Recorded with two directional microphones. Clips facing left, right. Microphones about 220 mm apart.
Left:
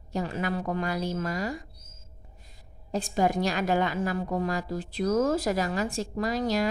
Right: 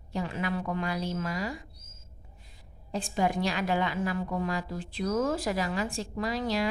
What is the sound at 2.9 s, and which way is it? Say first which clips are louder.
A woman's voice: left 3 dB; 40° left (ahead or behind).